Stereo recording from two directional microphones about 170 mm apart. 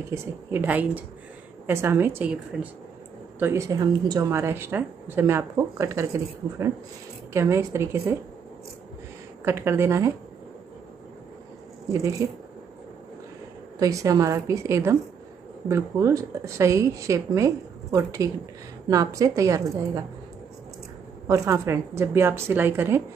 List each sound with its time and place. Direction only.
0.1 s a woman's voice: 10° right (ahead or behind)
9.4 s a woman's voice: 15° right (ahead or behind)
11.9 s a woman's voice: 20° right (ahead or behind)
13.7 s a woman's voice: 20° right (ahead or behind)
21.3 s a woman's voice: 15° right (ahead or behind)